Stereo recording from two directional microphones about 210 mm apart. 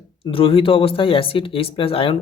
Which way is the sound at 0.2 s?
25° left (ahead or behind).